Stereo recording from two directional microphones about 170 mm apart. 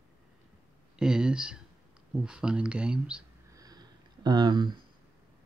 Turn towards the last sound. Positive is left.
turn(degrees=-25)  # may be behind; listen again after turning